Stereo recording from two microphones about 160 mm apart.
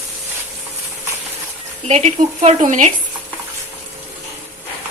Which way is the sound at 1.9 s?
45° right (ahead or behind).